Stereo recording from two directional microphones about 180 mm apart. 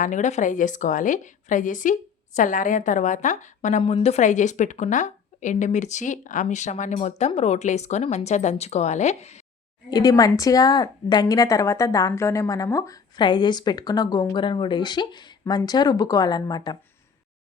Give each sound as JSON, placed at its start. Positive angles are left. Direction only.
{"t": 0.0, "sound": "a woman's voice", "side_deg": 40}
{"t": 9.9, "sound": "a woman's voice", "side_deg": 20}